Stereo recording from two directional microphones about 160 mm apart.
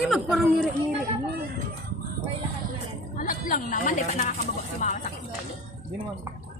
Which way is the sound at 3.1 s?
60° left (ahead or behind).